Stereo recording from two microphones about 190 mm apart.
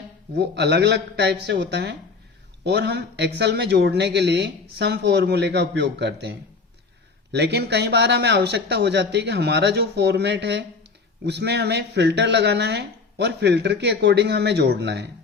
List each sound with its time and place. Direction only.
0.3 s speech: 60° right (ahead or behind)
7.3 s speech: 60° right (ahead or behind)